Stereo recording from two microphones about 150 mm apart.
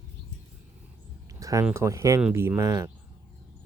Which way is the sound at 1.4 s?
20° right (ahead or behind).